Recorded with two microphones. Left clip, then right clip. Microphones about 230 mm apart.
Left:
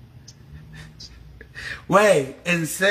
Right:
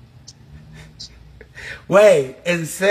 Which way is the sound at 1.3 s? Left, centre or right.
Centre.